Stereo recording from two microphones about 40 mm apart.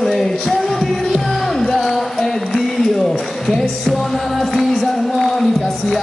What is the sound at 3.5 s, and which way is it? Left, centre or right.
Music, centre.